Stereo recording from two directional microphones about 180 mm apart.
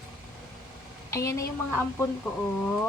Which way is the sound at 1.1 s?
15° left (ahead or behind).